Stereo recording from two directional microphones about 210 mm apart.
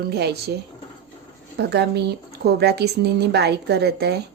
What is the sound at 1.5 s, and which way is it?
A woman's voice, 50° right (ahead or behind).